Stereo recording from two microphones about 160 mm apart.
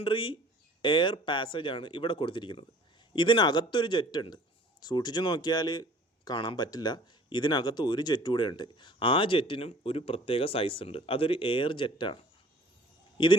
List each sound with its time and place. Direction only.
0.0 s speech: 30° left (ahead or behind)